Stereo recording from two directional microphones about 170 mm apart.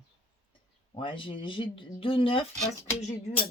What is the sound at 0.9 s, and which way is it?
Speech, 30° left (ahead or behind).